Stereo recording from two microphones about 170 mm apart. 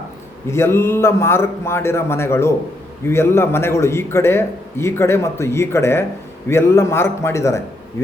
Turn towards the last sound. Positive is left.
turn(degrees=15)  # may be behind; listen again after turning